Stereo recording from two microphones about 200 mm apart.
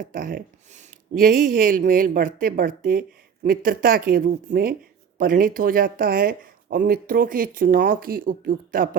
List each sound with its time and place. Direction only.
0.1 s speech: 45° right (ahead or behind)